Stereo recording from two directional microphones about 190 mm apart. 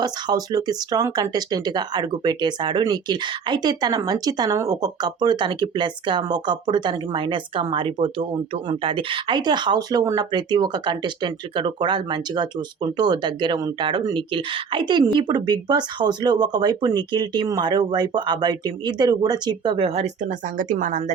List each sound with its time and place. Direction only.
0.0 s speech: 20° right (ahead or behind); by 21.0 s 40° right (ahead or behind)